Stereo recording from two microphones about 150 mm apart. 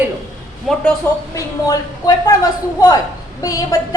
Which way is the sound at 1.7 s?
20° left (ahead or behind).